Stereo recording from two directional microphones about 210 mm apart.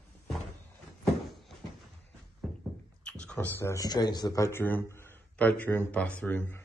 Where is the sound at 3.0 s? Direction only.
5° left (ahead or behind).